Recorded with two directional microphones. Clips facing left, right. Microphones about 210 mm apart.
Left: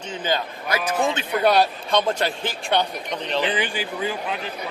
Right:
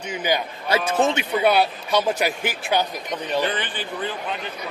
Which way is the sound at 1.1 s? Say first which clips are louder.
Even; 5° right (ahead or behind).